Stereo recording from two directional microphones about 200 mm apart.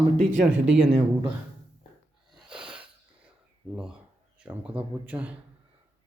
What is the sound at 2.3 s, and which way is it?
Sneeze, 5° right (ahead or behind).